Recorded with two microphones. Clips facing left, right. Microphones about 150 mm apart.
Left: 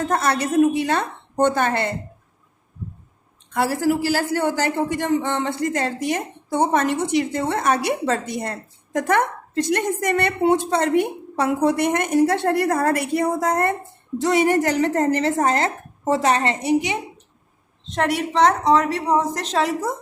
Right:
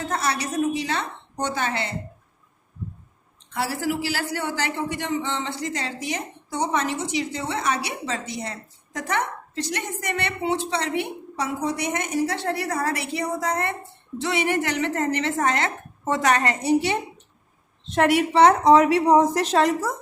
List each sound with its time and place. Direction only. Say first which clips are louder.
0.0 s a man's voice: left 5 dB; 50° left (ahead or behind)
3.5 s a man's voice: left 6 dB; 50° left (ahead or behind); by 17.0 s 20° left (ahead or behind)
17.8 s a woman's voice: right 3 dB; 5° right (ahead or behind)